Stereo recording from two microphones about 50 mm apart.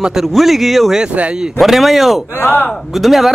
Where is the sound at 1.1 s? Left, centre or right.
Right.